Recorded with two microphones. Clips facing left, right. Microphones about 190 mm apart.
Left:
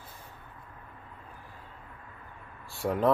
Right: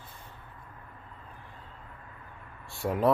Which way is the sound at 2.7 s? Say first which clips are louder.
Even; centre (ahead or behind).